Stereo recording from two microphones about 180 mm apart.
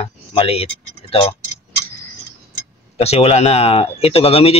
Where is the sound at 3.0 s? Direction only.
35° left (ahead or behind).